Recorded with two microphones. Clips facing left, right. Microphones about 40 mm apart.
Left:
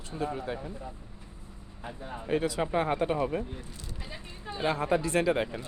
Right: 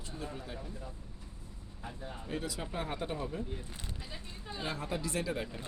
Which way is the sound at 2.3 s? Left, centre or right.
Left.